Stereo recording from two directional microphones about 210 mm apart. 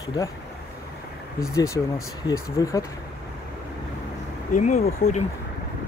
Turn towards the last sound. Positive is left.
turn(degrees=35)  # may be behind; listen again after turning